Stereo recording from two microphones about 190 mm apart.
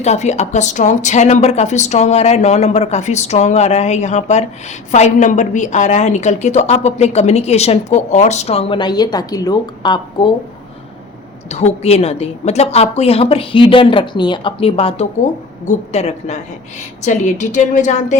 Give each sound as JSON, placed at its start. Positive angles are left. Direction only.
{"t": 0.0, "sound": "a woman's voice", "side_deg": 35}
{"t": 11.4, "sound": "a woman's voice", "side_deg": 35}